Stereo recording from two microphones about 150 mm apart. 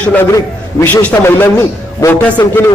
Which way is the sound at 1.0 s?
15° left (ahead or behind).